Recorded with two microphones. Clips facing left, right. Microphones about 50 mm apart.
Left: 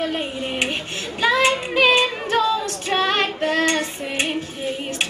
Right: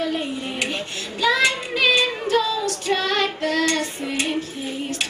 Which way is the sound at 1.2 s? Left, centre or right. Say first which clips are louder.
Left 1 dB; left.